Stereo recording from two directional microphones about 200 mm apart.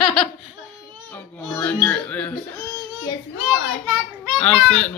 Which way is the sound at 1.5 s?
10° left (ahead or behind).